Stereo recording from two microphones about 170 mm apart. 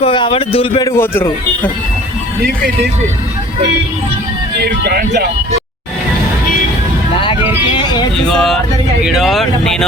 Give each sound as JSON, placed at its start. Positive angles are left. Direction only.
{"t": 0.0, "sound": "speech", "side_deg": 30}
{"t": 0.9, "sound": "a man's voice", "side_deg": 15}
{"t": 4.6, "sound": "speech", "side_deg": -70}
{"t": 7.7, "sound": "music", "side_deg": 30}
{"t": 8.3, "sound": "speech", "side_deg": 5}